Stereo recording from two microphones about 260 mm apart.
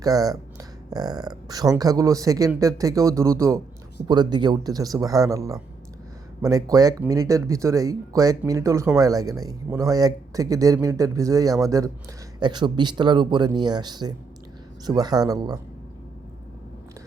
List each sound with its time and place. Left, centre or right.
0.0 s speech: centre